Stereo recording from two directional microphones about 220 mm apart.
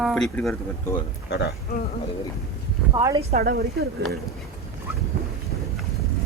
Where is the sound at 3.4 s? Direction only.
45° right (ahead or behind).